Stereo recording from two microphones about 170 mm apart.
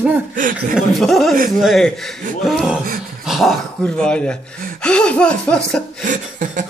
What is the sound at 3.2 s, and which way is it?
Dog, centre (ahead or behind).